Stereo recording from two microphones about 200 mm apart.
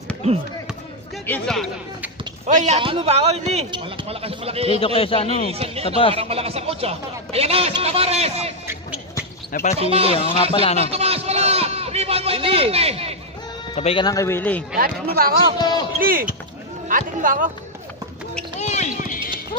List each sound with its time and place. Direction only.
1.2 s speech: 5° left (ahead or behind)
2.4 s speech: 35° right (ahead or behind)
4.7 s a man's voice: 30° left (ahead or behind)
5.5 s speech: 30° right (ahead or behind)
9.5 s speech: 45° left (ahead or behind)
9.8 s speech: 30° right (ahead or behind)
10.6 s speech: 30° left (ahead or behind)
10.9 s a man's voice: 30° right (ahead or behind)
13.7 s speech: 25° left (ahead or behind); by 14.6 s 10° left (ahead or behind)
14.8 s speech: 45° right (ahead or behind)
15.5 s a man's voice: 20° left (ahead or behind)
16.0 s speech: 45° right (ahead or behind)
18.6 s run: 35° left (ahead or behind)